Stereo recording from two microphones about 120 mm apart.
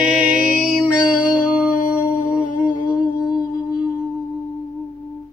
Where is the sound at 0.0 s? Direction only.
10° right (ahead or behind).